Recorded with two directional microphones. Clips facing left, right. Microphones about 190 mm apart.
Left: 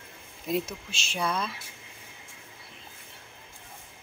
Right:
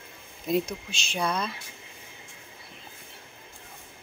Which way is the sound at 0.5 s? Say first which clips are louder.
Right 3 dB; 5° left (ahead or behind).